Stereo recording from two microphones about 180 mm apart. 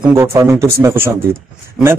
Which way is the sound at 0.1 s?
15° right (ahead or behind).